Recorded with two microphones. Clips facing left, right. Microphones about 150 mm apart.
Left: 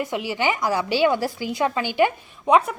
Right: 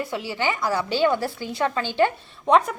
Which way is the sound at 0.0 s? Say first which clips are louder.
Left 2 dB; 20° left (ahead or behind).